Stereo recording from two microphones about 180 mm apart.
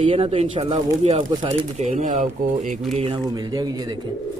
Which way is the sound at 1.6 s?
40° right (ahead or behind).